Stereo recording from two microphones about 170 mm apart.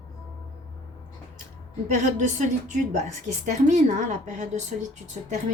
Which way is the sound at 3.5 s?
45° right (ahead or behind).